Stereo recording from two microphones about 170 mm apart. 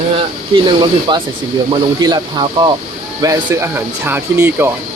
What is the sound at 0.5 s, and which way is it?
Speech, 25° right (ahead or behind).